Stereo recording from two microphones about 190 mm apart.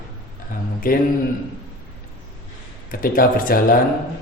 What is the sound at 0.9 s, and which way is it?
Speech, 50° left (ahead or behind).